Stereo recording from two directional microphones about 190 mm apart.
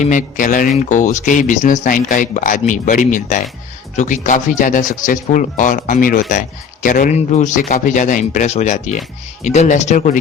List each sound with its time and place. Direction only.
0.0 s speech: 40° left (ahead or behind)